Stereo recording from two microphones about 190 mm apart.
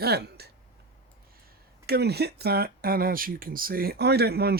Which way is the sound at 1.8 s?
55° right (ahead or behind).